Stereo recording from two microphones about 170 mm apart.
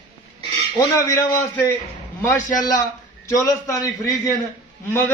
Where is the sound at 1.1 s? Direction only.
15° left (ahead or behind).